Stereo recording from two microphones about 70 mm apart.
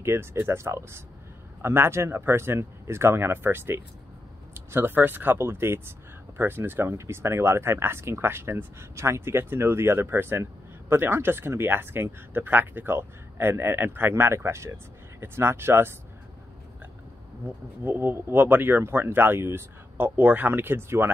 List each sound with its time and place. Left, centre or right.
0.0 s speech: right
17.8 s speech: right